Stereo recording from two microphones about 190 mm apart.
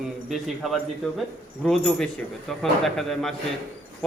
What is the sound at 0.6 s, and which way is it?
Speech, centre (ahead or behind).